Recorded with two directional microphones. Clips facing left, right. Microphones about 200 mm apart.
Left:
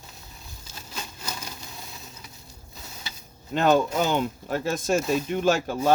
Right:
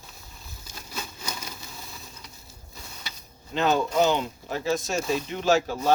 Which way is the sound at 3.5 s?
50° left (ahead or behind).